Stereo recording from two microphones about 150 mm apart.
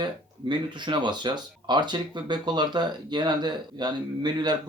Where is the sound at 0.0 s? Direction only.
30° right (ahead or behind).